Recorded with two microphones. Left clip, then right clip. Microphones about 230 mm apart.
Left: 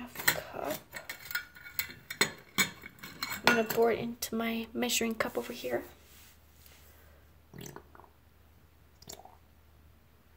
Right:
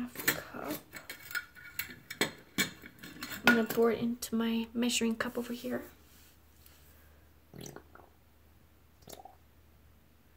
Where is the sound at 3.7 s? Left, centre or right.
Left.